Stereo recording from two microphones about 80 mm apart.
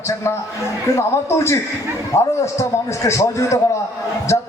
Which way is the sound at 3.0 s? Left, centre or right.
Left.